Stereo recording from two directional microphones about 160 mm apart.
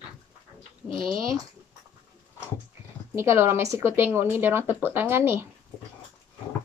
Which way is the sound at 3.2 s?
15° right (ahead or behind).